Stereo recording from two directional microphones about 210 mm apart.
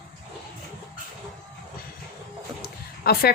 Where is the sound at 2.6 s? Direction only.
45° left (ahead or behind).